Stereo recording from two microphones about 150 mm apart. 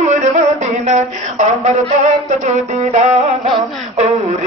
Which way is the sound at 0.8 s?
50° right (ahead or behind).